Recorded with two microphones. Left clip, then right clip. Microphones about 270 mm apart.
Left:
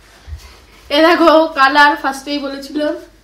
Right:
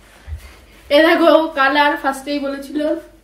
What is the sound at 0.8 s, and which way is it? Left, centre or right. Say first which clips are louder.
A woman's voice: left 1 dB; centre.